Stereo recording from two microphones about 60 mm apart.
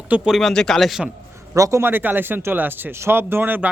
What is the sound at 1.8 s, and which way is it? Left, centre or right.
Speech, right.